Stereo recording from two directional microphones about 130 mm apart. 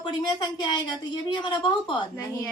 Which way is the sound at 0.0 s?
35° left (ahead or behind).